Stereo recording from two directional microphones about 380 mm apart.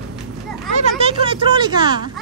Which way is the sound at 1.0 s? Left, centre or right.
Centre.